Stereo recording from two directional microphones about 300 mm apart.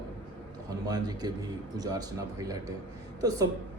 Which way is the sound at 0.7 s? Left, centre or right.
Centre.